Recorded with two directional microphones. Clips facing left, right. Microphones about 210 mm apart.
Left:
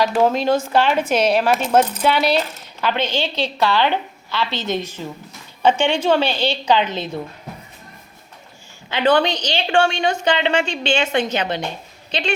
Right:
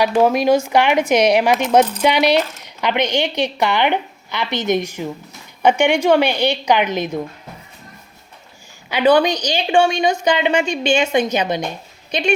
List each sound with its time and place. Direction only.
0.0 s a woman's voice: 10° right (ahead or behind)
8.9 s a woman's voice: 10° right (ahead or behind)